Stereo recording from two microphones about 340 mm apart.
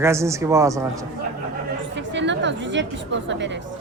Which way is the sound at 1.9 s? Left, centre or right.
Right.